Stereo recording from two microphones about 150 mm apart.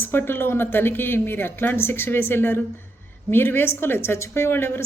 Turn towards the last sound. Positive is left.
turn(degrees=15)  # may be behind; listen again after turning